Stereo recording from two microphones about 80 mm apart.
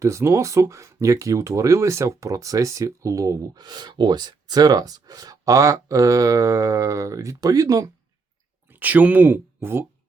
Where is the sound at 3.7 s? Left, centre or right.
Right.